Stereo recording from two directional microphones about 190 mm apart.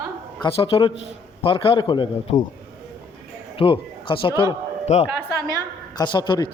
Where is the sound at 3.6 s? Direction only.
25° left (ahead or behind).